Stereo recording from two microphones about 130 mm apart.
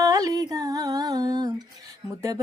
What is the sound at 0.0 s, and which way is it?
Humming, 25° right (ahead or behind).